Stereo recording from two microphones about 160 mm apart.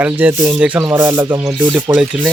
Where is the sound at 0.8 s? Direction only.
25° right (ahead or behind).